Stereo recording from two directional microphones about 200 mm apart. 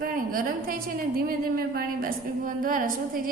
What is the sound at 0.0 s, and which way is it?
A woman's voice, 45° right (ahead or behind).